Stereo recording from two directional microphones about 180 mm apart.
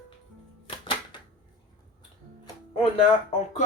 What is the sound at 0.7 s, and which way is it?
Music, 30° left (ahead or behind).